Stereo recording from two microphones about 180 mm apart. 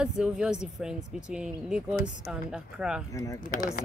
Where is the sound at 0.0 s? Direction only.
5° right (ahead or behind).